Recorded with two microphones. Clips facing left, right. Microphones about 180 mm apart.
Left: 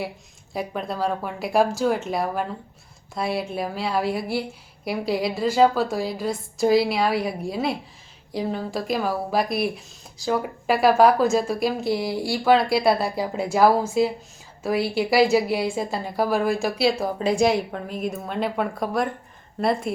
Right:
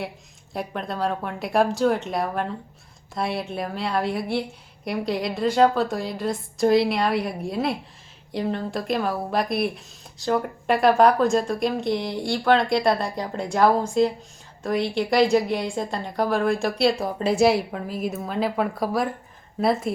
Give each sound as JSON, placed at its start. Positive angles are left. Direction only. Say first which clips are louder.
{"t": 0.5, "sound": "speech", "louder": "left 1 dB", "side_deg": 0}